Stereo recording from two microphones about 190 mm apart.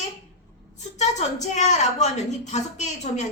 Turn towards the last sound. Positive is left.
turn(degrees=35)  # may be behind; listen again after turning